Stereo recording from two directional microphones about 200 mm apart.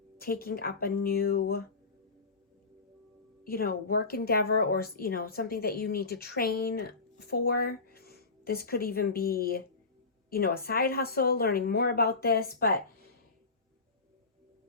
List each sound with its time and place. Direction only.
0.2 s speech: 50° left (ahead or behind)
3.4 s speech: 45° left (ahead or behind)